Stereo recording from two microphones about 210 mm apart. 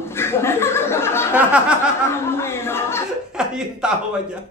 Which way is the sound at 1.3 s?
5° right (ahead or behind).